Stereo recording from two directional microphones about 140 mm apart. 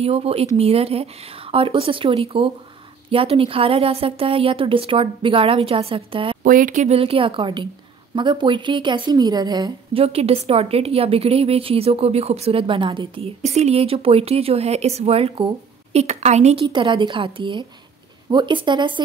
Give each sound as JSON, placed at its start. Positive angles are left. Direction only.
{"t": 0.0, "sound": "a woman's voice", "side_deg": -45}
{"t": 6.4, "sound": "speech", "side_deg": -75}
{"t": 7.0, "sound": "speech", "side_deg": -40}
{"t": 9.9, "sound": "a woman's voice", "side_deg": -45}
{"t": 13.4, "sound": "a woman's voice", "side_deg": -50}
{"t": 16.6, "sound": "speech", "side_deg": -35}